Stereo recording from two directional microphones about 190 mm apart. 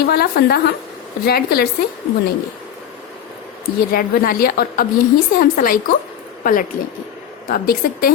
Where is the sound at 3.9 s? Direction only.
50° left (ahead or behind).